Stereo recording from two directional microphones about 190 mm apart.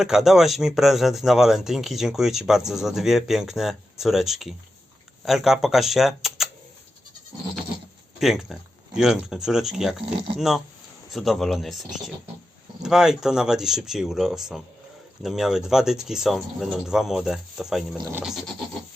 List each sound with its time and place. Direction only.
0.0 s speech: centre (ahead or behind)
8.2 s speech: centre (ahead or behind)